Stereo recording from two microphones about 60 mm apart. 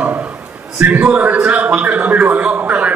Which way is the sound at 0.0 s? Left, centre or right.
Right.